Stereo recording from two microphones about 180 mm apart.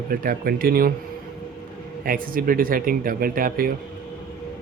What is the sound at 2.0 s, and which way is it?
Speech, 55° right (ahead or behind).